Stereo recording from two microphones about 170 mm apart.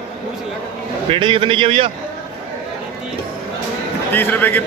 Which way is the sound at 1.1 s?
30° right (ahead or behind).